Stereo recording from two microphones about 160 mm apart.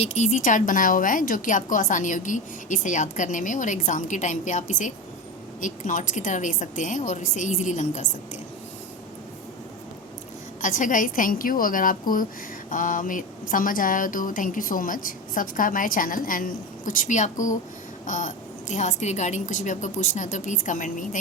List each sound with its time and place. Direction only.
0.0 s a woman's voice: 45° left (ahead or behind)
10.6 s a woman's voice: 55° left (ahead or behind)